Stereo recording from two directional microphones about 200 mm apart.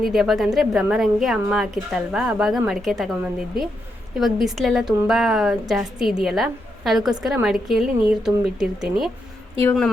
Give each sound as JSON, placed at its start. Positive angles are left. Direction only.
{"t": 0.0, "sound": "a woman's voice", "side_deg": 0}